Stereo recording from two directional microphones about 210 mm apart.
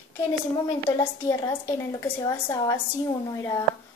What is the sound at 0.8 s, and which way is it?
A woman's voice, 15° left (ahead or behind).